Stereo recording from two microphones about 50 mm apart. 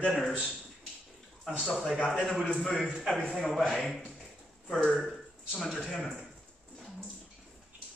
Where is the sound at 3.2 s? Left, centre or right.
Centre.